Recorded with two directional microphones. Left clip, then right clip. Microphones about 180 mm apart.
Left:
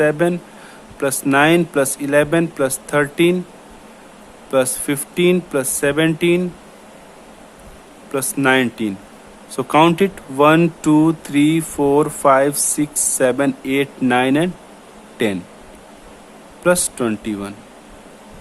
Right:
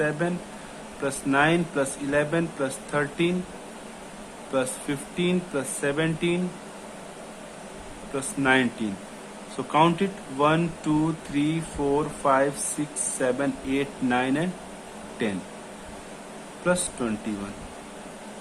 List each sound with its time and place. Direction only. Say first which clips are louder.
0.0 s speech: left 10 dB; 65° left (ahead or behind)
4.5 s speech: left 10 dB; 65° left (ahead or behind)
8.1 s speech: left 7 dB; 65° left (ahead or behind)
16.6 s speech: left 9 dB; 70° left (ahead or behind)